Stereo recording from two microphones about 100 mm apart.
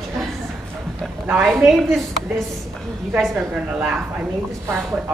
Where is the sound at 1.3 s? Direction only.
5° right (ahead or behind).